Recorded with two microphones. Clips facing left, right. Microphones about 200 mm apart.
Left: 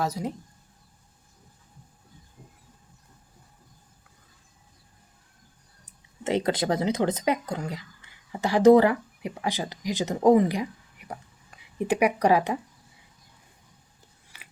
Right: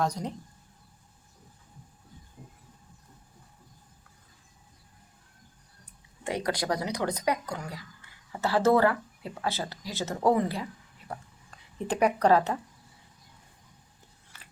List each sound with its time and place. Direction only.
0.0 s speech: 5° left (ahead or behind)
5.8 s speech: 25° left (ahead or behind)